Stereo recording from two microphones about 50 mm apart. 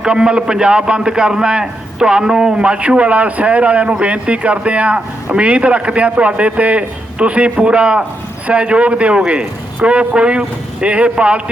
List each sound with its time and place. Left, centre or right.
0.0 s a man's voice: centre